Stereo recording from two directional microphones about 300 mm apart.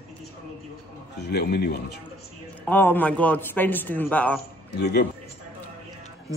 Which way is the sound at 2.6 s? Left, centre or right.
Centre.